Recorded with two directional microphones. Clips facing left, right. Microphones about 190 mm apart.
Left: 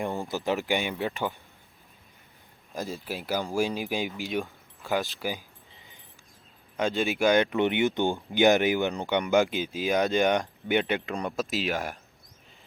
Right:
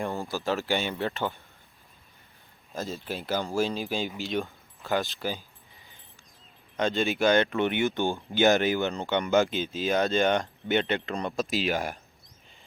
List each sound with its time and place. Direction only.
0.0 s speech: 15° left (ahead or behind)
2.7 s speech: 10° left (ahead or behind)
5.2 s keys jangling: 10° left (ahead or behind)
6.7 s speech: 10° left (ahead or behind)